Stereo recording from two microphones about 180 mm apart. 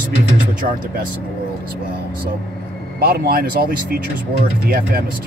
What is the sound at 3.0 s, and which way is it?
Speech, 60° right (ahead or behind).